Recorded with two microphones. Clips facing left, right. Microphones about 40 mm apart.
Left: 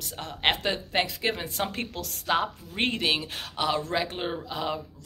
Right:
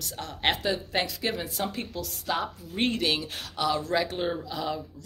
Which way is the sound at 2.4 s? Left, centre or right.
Left.